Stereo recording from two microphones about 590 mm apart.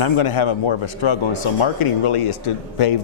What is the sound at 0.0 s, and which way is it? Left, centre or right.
Speech, left.